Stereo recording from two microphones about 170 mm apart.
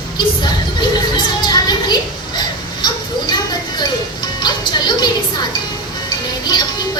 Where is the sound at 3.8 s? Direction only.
25° left (ahead or behind).